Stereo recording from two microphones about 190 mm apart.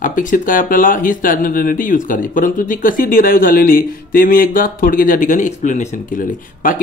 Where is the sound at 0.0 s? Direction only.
45° left (ahead or behind).